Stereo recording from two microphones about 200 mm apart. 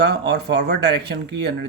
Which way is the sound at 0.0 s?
55° right (ahead or behind).